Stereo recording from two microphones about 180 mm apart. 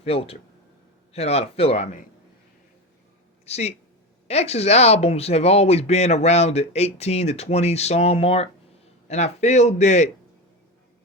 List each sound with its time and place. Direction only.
0.0 s speech: 35° left (ahead or behind)
3.4 s speech: 35° left (ahead or behind)